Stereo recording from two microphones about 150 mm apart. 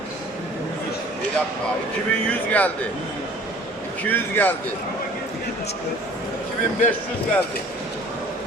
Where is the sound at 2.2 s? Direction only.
10° left (ahead or behind).